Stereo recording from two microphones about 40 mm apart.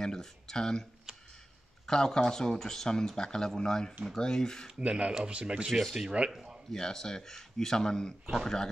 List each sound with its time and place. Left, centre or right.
0.0 s speech: centre
1.1 s a sound: centre
1.9 s speech: centre
4.7 s speech: right
5.7 s speech: centre
6.0 s speech: right
6.7 s speech: centre